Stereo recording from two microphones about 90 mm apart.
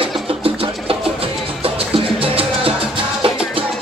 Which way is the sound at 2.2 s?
90° right.